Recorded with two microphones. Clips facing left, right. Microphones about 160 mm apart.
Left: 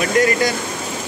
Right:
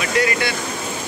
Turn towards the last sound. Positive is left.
turn(degrees=45)  # may be behind; listen again after turning